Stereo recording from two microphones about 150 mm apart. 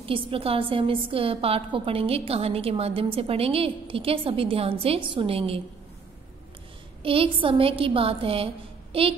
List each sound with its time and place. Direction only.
0.0 s a woman's voice: 35° right (ahead or behind)
7.0 s a woman's voice: 35° right (ahead or behind)